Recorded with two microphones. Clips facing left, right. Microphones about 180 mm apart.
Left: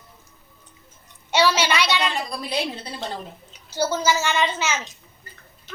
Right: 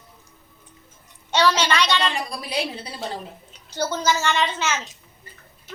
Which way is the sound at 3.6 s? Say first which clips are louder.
Left 1 dB; 5° left (ahead or behind).